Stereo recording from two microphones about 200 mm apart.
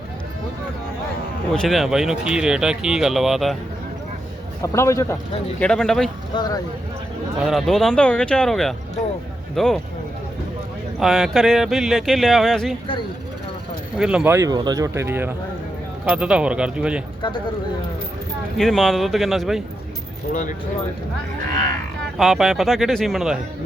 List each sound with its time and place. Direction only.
1.5 s speech: centre (ahead or behind)
4.6 s a man's voice: 15° left (ahead or behind)
5.5 s speech: 5° left (ahead or behind)
6.3 s speech: 20° left (ahead or behind)
7.3 s speech: centre (ahead or behind)
11.0 s speech: centre (ahead or behind)
13.9 s speech: 5° right (ahead or behind)
18.5 s speech: centre (ahead or behind)
20.3 s speech: 40° left (ahead or behind)
22.2 s speech: centre (ahead or behind)